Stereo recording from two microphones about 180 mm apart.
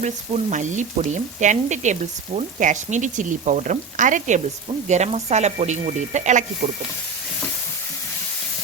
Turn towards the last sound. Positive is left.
turn(degrees=-40)  # may be behind; listen again after turning